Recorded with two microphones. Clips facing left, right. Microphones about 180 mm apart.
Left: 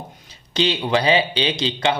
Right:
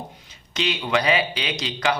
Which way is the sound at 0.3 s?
30° left (ahead or behind).